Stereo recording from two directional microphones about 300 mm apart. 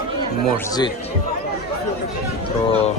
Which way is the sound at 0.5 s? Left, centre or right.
Centre.